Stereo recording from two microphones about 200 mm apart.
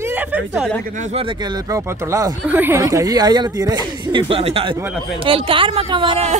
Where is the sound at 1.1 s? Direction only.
25° right (ahead or behind).